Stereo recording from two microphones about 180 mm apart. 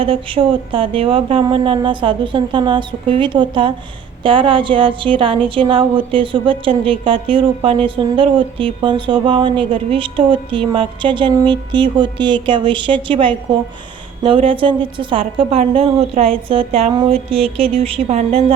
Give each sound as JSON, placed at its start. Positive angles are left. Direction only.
{"t": 0.0, "sound": "a woman's voice", "side_deg": -30}